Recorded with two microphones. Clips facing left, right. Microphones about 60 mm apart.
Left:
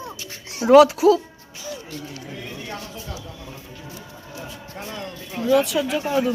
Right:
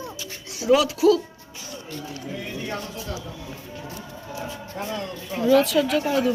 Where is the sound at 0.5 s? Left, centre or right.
Left.